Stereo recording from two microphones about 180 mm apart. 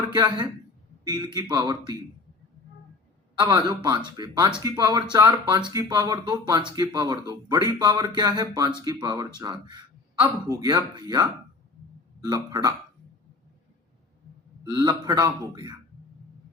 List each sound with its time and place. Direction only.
0.1 s speech: 25° right (ahead or behind)
3.3 s speech: 20° right (ahead or behind)
14.6 s speech: 20° right (ahead or behind)